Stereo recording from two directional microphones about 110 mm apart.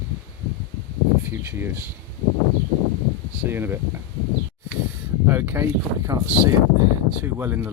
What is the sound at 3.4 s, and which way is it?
Speech, 20° right (ahead or behind).